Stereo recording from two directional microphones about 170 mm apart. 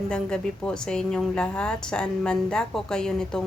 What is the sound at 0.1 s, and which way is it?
A woman's voice, 5° left (ahead or behind).